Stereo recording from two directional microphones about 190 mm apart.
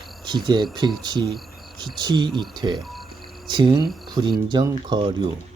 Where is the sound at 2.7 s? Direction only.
Centre (ahead or behind).